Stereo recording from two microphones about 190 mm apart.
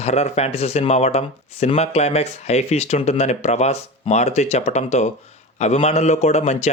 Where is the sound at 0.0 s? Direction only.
35° left (ahead or behind).